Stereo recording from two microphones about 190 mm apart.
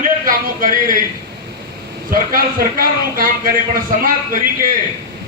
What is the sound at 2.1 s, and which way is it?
A man's voice, 50° right (ahead or behind).